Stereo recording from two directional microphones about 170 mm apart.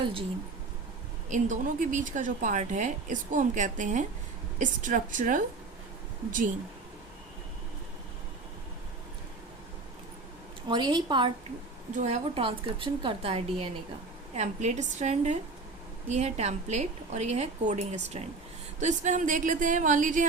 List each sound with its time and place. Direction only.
0.0 s speech: 30° right (ahead or behind)
1.3 s speech: 45° right (ahead or behind)
10.7 s a woman's voice: 25° right (ahead or behind)
11.9 s speech: 40° right (ahead or behind)